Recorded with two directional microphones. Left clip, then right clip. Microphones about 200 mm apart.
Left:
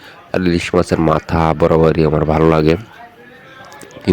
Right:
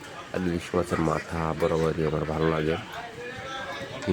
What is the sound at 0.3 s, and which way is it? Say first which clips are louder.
Speech: left 14 dB; 45° left (ahead or behind).